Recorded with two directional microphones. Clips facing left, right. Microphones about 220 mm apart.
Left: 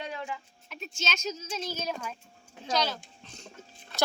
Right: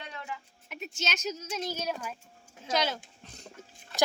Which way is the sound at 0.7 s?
15° right (ahead or behind).